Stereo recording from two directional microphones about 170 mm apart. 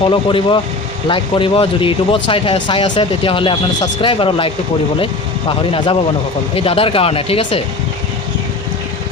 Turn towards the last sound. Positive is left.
turn(degrees=35)  # may be behind; listen again after turning